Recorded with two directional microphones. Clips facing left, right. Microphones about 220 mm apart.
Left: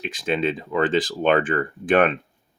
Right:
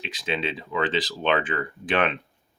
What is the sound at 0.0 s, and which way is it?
Speech, 50° left (ahead or behind).